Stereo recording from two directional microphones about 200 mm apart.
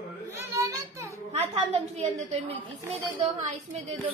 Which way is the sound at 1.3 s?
30° right (ahead or behind).